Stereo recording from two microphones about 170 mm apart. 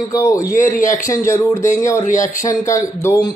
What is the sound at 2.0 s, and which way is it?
Speech, 50° left (ahead or behind).